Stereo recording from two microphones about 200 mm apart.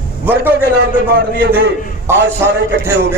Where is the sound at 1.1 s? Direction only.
55° right (ahead or behind).